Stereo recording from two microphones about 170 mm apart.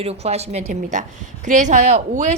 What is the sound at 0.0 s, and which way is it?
A woman's voice, 40° right (ahead or behind).